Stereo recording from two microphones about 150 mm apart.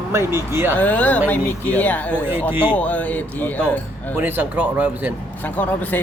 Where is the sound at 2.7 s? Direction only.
10° left (ahead or behind).